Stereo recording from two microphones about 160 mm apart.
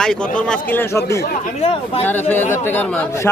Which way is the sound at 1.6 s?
35° left (ahead or behind).